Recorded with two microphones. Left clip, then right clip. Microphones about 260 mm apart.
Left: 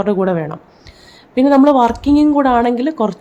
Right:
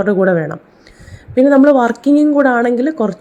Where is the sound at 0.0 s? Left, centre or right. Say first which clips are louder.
Right 3 dB; centre.